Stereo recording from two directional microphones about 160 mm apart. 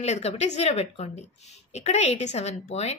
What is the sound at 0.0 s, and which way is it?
A woman's voice, 40° left (ahead or behind).